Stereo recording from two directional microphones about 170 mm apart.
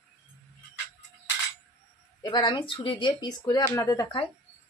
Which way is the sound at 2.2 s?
25° left (ahead or behind).